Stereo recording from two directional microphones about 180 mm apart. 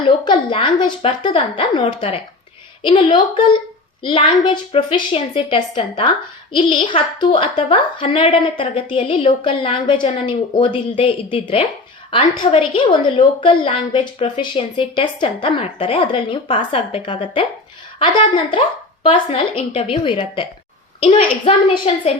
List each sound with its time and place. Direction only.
0.0 s a woman's voice: 25° left (ahead or behind)